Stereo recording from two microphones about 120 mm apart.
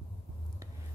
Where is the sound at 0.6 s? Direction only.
25° right (ahead or behind).